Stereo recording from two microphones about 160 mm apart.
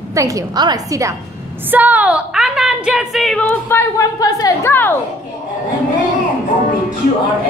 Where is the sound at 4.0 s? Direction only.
20° left (ahead or behind).